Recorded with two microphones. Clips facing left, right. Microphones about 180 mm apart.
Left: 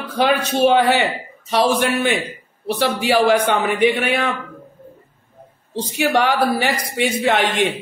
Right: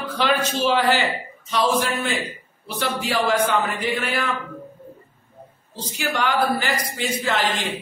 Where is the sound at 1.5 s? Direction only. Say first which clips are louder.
Left 4 dB; 75° left (ahead or behind).